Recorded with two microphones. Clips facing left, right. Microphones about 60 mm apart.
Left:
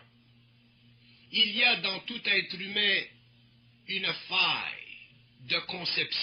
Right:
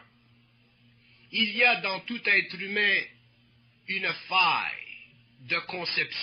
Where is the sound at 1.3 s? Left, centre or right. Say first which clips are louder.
Right 3 dB; right.